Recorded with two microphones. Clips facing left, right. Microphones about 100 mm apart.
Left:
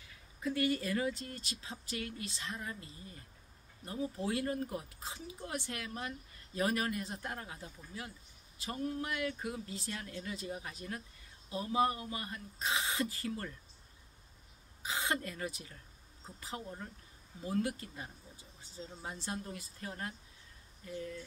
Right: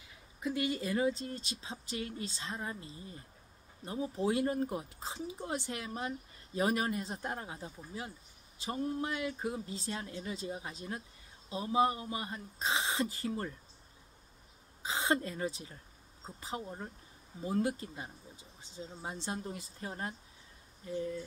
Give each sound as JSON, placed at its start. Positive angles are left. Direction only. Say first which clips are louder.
{"t": 0.0, "sound": "speech", "louder": "right 1 dB", "side_deg": -20}
{"t": 14.8, "sound": "a woman's voice", "louder": "right 4 dB", "side_deg": -25}